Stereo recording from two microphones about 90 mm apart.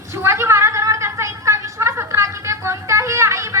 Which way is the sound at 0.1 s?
30° right (ahead or behind).